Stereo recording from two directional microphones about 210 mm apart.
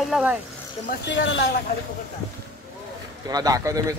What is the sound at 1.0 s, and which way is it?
Speech, 55° left (ahead or behind).